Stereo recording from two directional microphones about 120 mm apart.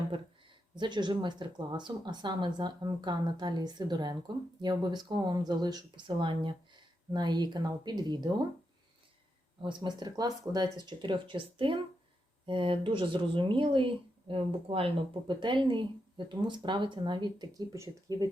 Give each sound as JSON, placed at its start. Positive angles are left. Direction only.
{"t": 0.8, "sound": "speech", "side_deg": -40}
{"t": 9.6, "sound": "speech", "side_deg": -40}